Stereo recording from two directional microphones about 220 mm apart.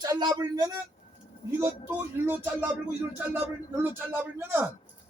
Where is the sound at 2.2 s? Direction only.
10° right (ahead or behind).